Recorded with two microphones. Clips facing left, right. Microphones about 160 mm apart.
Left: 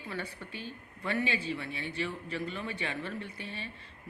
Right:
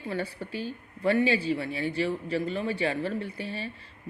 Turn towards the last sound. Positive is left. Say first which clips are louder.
# right 7 dB
turn(degrees=-35)  # may be behind; listen again after turning